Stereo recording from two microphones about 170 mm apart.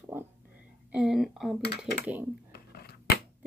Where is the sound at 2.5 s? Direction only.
70° left (ahead or behind).